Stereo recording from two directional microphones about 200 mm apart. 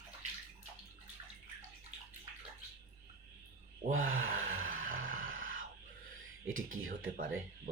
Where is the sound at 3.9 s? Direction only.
85° right.